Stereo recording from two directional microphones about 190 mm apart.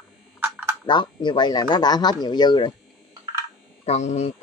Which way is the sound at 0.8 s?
25° left (ahead or behind).